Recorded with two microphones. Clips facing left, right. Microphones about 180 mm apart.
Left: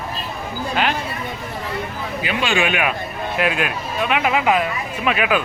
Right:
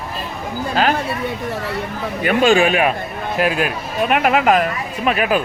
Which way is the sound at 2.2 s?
40° right (ahead or behind).